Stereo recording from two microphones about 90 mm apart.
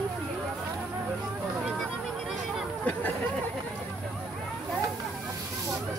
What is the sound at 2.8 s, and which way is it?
Chatter, 15° left (ahead or behind).